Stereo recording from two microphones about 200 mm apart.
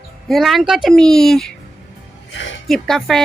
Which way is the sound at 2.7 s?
Centre (ahead or behind).